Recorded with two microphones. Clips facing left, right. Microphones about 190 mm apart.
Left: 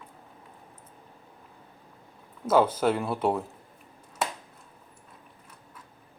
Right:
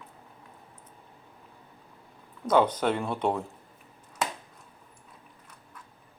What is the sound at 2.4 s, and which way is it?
A man's voice, 5° left (ahead or behind).